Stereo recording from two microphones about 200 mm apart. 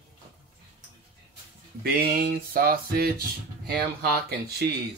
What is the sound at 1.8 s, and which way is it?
Speech, 50° right (ahead or behind).